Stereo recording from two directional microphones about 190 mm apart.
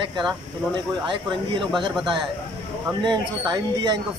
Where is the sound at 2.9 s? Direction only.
25° right (ahead or behind).